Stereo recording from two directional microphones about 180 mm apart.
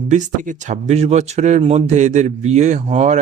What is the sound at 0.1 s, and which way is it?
Speech, 45° right (ahead or behind).